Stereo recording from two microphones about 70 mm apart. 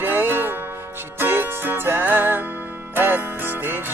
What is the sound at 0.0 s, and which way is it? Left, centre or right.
Music, right.